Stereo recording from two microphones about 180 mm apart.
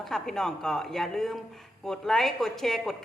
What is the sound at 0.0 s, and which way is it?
A man's voice, centre (ahead or behind).